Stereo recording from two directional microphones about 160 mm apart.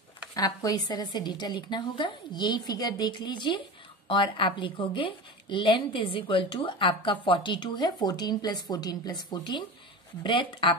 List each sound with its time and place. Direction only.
0.3 s a woman's voice: 25° left (ahead or behind)